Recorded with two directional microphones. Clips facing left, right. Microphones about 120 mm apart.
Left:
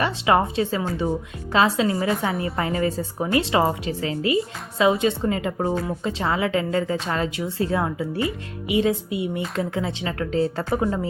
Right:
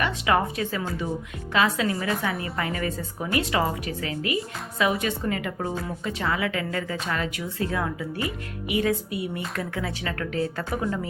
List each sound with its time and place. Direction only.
0.0 s a woman's voice: 25° left (ahead or behind)